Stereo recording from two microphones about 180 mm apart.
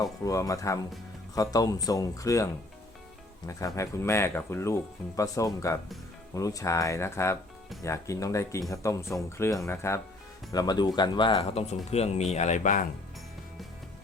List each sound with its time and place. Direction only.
0.3 s speech: 20° left (ahead or behind); by 12.9 s 45° left (ahead or behind)